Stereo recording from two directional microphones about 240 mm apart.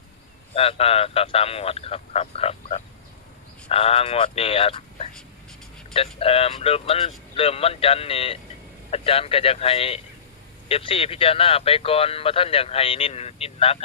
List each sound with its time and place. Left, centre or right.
0.5 s speech: left